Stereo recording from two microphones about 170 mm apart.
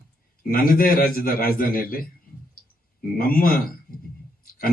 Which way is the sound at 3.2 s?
60° left (ahead or behind).